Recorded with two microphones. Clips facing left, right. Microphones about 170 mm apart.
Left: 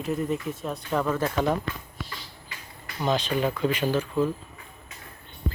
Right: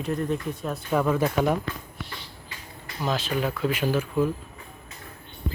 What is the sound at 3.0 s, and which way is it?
Speech, 5° right (ahead or behind).